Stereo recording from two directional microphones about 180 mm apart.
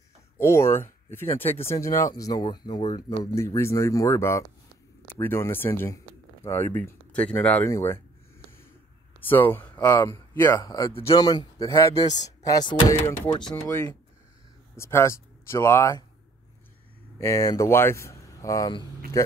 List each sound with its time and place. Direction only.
0.4 s speech: 15° left (ahead or behind)
9.3 s speech: 10° left (ahead or behind)
10.6 s a man's voice: 25° left (ahead or behind)
17.2 s speech: 15° left (ahead or behind)